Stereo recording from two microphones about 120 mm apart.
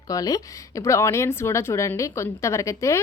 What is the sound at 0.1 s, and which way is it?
A woman's voice, 30° left (ahead or behind).